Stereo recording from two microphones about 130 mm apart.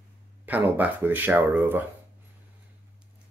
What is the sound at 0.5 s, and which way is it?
Speech, 15° right (ahead or behind).